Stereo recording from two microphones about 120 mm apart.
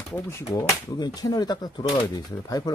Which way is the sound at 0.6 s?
30° left (ahead or behind).